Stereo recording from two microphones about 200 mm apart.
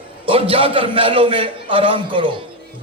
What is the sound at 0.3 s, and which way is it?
A man's voice, 25° right (ahead or behind).